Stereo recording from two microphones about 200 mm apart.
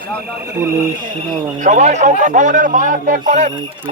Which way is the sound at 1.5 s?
40° right (ahead or behind).